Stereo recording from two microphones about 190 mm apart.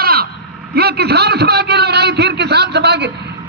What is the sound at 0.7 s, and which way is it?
A man's voice, 55° right (ahead or behind).